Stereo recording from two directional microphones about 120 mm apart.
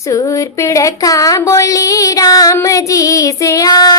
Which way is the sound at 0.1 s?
25° left (ahead or behind).